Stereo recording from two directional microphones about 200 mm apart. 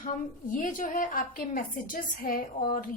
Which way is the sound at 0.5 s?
40° left (ahead or behind).